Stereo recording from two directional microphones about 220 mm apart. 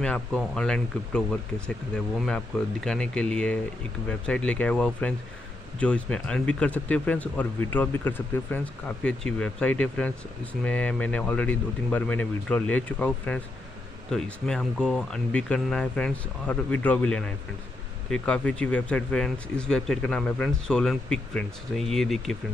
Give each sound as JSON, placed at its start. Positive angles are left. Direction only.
{"t": 0.0, "sound": "speech", "side_deg": 5}